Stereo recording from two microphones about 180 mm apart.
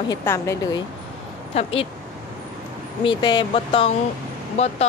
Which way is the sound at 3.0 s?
25° left (ahead or behind).